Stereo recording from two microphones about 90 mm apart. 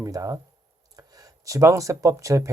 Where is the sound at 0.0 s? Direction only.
40° right (ahead or behind).